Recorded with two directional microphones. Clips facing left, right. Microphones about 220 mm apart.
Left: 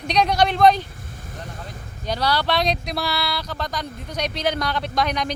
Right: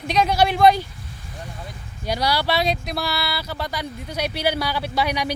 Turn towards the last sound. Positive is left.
turn(degrees=-10)  # may be behind; listen again after turning